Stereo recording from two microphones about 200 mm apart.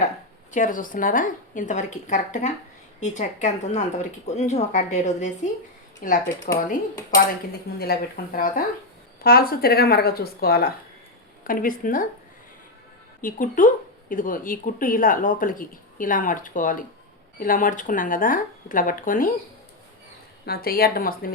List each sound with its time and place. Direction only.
0.5 s a woman's voice: 40° left (ahead or behind)
7.8 s speech: 50° left (ahead or behind)
13.2 s speech: 40° left (ahead or behind)
20.4 s speech: 50° left (ahead or behind)